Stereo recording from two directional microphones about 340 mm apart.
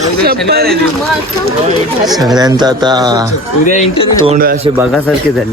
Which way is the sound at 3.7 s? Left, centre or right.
Centre.